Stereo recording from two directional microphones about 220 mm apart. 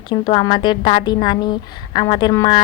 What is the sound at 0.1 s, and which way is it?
A woman's voice, 20° left (ahead or behind).